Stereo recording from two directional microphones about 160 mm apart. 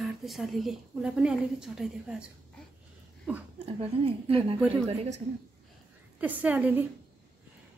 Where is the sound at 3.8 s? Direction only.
35° right (ahead or behind).